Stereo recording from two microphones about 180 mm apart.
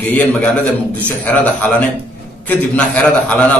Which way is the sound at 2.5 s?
10° left (ahead or behind).